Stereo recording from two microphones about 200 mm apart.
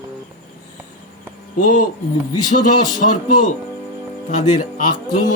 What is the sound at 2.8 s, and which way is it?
Speech, 40° left (ahead or behind).